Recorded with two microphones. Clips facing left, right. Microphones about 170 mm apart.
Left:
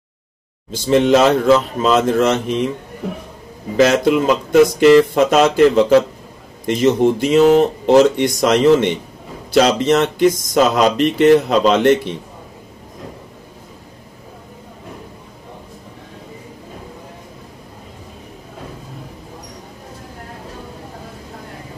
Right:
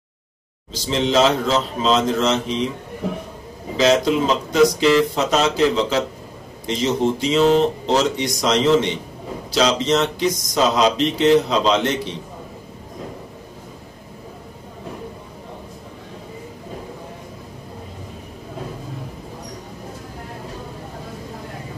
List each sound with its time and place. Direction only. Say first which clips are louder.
0.7 s speech: left 8 dB; 55° left (ahead or behind)
3.7 s speech: left 3 dB; 55° left (ahead or behind)